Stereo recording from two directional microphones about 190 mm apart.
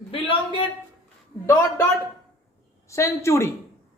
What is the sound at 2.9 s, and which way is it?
Speech, 15° left (ahead or behind).